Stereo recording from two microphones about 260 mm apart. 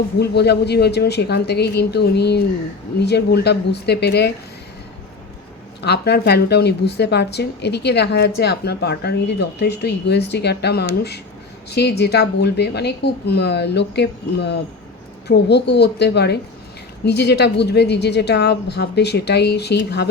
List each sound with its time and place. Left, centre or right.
0.2 s a woman's voice: left
5.8 s a woman's voice: left